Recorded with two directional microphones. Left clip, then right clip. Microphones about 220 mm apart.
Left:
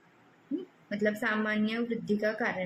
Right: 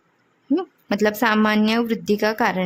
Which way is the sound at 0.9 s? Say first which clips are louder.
Right 10 dB; 50° right (ahead or behind).